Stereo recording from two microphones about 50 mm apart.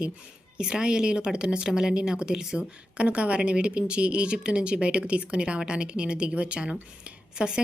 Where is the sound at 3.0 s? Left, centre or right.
Right.